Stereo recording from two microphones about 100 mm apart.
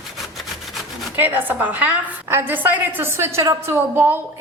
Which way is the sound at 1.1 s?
20° right (ahead or behind).